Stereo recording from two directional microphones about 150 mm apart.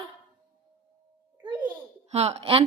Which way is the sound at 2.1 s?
45° right (ahead or behind).